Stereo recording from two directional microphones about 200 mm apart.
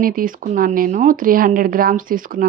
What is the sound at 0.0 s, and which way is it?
Speech, 45° right (ahead or behind).